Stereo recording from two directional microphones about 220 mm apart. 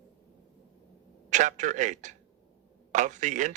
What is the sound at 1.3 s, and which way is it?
Speech, 35° right (ahead or behind).